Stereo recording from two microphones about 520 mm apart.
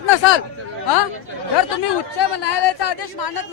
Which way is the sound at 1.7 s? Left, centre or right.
Left.